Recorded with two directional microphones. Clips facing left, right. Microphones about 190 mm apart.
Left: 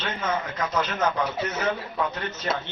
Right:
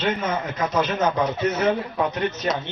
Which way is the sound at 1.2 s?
20° right (ahead or behind).